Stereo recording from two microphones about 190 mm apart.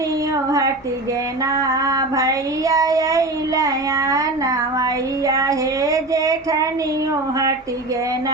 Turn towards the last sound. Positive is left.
turn(degrees=-20)  # may be behind; listen again after turning